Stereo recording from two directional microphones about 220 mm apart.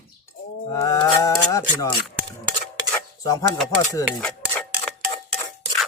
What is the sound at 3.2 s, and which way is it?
Speech, 15° left (ahead or behind).